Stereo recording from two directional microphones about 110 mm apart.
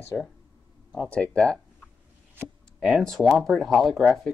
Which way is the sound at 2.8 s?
5° left (ahead or behind).